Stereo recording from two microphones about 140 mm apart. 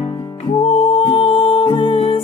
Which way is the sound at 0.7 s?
40° left (ahead or behind).